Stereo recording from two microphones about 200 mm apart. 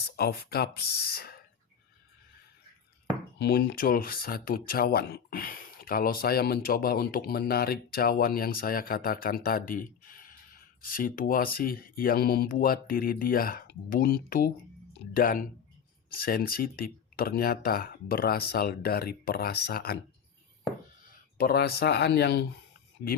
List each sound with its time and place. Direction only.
0.2 s speech: 50° left (ahead or behind)
3.3 s speech: 55° left (ahead or behind)
21.3 s speech: 50° left (ahead or behind)